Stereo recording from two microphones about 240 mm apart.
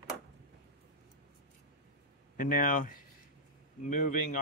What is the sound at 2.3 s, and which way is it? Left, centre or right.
Speech, left.